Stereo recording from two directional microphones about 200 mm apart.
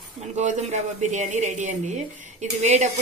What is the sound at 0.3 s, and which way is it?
Speech, 35° right (ahead or behind).